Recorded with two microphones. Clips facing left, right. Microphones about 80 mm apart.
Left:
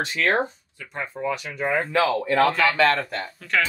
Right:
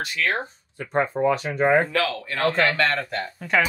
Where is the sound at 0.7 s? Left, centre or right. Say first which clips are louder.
Right 9 dB; right.